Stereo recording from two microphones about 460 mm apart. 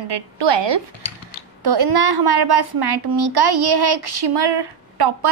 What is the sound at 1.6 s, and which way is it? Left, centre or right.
A child's voice, right.